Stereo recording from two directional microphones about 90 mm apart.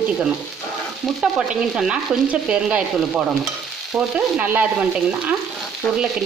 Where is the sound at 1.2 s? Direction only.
5° right (ahead or behind).